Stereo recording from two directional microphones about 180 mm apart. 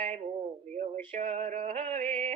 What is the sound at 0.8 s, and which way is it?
Male singing, 40° right (ahead or behind).